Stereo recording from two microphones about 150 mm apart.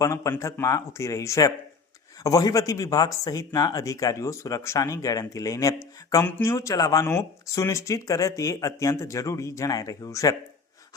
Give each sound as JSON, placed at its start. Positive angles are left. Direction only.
{"t": 0.0, "sound": "speech", "side_deg": 20}